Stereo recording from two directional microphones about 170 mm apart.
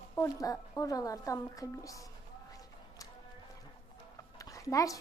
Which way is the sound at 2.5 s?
20° left (ahead or behind).